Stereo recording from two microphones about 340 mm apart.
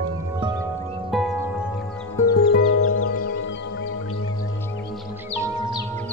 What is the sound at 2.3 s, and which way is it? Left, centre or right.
Music, left.